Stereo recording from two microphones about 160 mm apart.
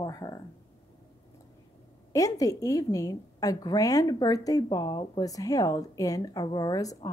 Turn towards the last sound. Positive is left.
turn(degrees=20)  # may be behind; listen again after turning